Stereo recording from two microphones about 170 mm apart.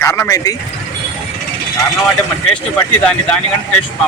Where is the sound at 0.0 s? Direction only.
15° left (ahead or behind).